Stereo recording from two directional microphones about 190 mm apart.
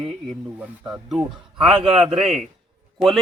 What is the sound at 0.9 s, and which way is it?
Speech, centre (ahead or behind).